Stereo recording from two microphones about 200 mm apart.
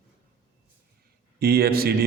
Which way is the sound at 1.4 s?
50° right (ahead or behind).